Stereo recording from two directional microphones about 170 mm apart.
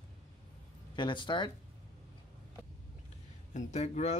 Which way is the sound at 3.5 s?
40° left (ahead or behind).